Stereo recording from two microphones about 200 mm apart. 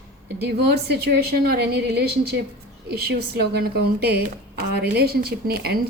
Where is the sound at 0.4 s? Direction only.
55° right (ahead or behind).